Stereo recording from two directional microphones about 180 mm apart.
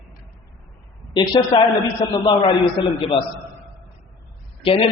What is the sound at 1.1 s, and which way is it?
Speech, 25° left (ahead or behind).